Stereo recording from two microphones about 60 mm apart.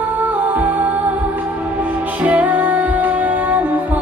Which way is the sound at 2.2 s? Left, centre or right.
Right.